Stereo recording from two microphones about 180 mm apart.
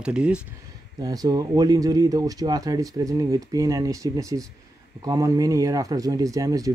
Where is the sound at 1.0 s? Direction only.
20° right (ahead or behind).